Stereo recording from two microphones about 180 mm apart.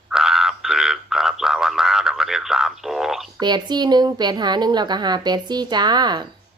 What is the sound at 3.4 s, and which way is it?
A woman's voice, 25° right (ahead or behind).